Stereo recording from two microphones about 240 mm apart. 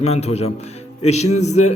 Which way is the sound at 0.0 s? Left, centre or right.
Left.